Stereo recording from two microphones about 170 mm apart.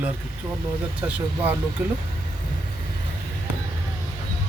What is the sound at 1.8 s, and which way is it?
Speech, 10° right (ahead or behind).